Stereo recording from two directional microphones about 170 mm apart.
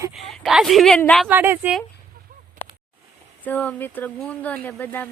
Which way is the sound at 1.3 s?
10° right (ahead or behind).